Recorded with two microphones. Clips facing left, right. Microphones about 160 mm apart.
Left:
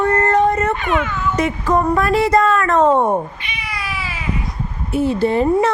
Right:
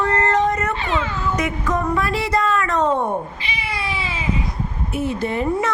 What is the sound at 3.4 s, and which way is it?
Cat, 30° right (ahead or behind).